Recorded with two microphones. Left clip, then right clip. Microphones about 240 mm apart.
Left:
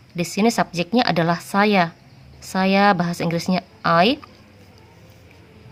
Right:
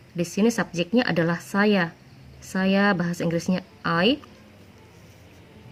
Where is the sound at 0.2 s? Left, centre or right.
Left.